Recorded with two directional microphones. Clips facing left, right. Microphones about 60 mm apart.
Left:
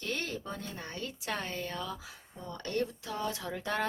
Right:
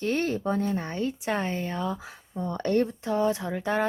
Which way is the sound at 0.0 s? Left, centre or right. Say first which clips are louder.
Right 10 dB; right.